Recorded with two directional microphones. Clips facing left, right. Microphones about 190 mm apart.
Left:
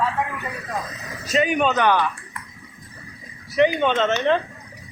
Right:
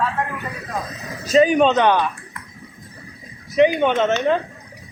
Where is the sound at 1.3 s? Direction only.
35° right (ahead or behind).